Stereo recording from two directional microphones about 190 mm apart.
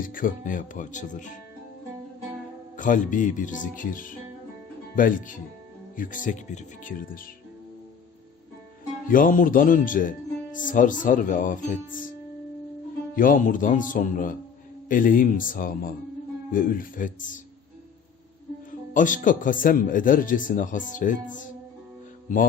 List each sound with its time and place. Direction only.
0.0 s speech: 45° left (ahead or behind)
2.7 s speech: 45° left (ahead or behind)
9.0 s speech: 45° left (ahead or behind)
13.1 s speech: 45° left (ahead or behind)
18.9 s speech: 45° left (ahead or behind)